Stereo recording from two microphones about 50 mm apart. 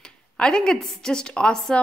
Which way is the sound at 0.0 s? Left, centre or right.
Centre.